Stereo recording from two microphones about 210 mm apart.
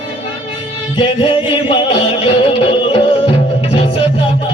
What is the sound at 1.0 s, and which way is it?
Music, 25° left (ahead or behind).